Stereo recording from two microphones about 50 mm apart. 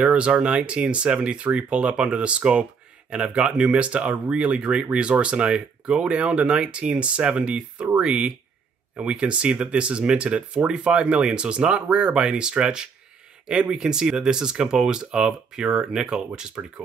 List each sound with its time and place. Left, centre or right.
0.0 s speech: right